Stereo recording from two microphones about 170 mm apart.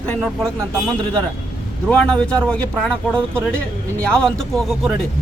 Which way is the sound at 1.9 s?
5° left (ahead or behind).